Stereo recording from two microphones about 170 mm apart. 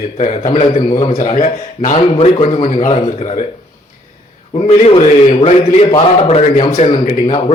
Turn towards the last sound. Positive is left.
turn(degrees=35)  # may be behind; listen again after turning